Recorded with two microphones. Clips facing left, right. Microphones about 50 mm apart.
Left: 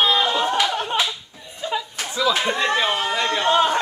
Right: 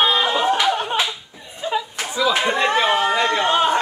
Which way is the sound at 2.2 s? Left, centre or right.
Right.